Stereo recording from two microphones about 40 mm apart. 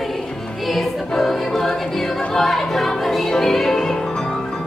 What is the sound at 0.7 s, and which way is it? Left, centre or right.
Choir, centre.